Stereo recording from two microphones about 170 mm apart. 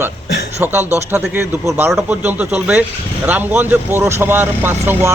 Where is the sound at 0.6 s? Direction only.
15° right (ahead or behind).